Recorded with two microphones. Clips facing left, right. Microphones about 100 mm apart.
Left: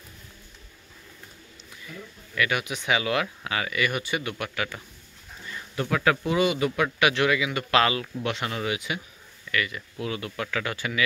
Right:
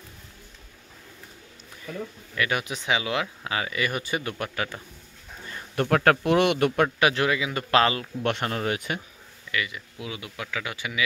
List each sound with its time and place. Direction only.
2.3 s speech: 30° right (ahead or behind)
3.0 s speech: 25° right (ahead or behind)
5.8 s speech: 55° right (ahead or behind)
6.2 s speech: 65° right (ahead or behind)
7.0 s speech: 35° right (ahead or behind)
8.2 s speech: 50° right (ahead or behind)
9.5 s speech: 15° right (ahead or behind)